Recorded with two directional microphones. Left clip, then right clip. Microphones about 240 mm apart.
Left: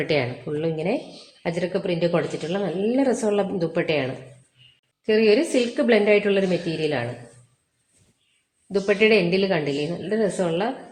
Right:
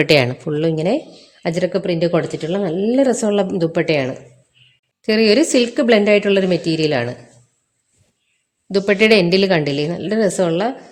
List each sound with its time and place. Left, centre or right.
0.0 s a woman's voice: right
8.7 s a woman's voice: right